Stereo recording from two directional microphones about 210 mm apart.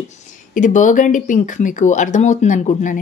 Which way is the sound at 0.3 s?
35° left (ahead or behind).